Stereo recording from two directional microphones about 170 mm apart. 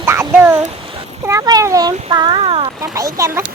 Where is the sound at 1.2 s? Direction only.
15° right (ahead or behind).